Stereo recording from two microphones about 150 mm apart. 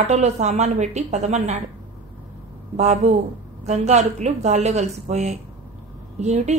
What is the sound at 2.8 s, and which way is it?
Speech, 45° right (ahead or behind).